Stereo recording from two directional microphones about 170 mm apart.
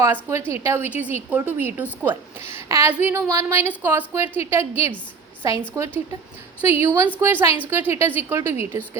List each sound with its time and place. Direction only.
0.0 s a woman's voice: 15° right (ahead or behind)